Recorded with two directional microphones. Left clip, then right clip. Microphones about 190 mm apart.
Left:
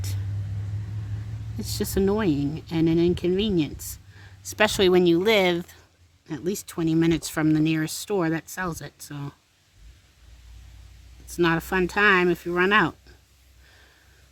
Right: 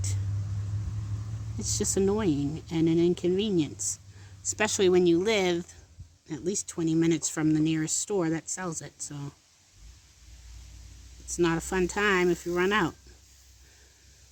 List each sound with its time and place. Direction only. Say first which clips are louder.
1.5 s speech: left 2 dB; 20° left (ahead or behind)
11.3 s speech: left 4 dB; 25° left (ahead or behind)